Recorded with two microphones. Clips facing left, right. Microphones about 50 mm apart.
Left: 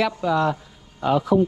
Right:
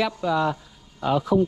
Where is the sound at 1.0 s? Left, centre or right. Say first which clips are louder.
Left 2 dB; left.